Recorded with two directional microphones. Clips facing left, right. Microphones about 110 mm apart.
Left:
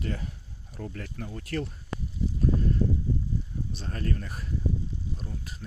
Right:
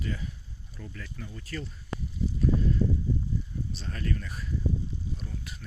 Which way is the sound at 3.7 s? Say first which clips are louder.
Left 2 dB; 40° left (ahead or behind).